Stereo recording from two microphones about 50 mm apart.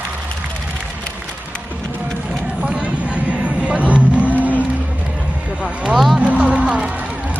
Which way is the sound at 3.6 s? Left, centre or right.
Right.